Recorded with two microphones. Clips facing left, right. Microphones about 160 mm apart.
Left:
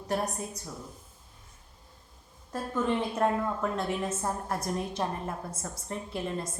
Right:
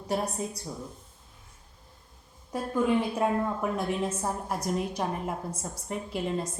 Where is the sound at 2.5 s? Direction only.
10° right (ahead or behind).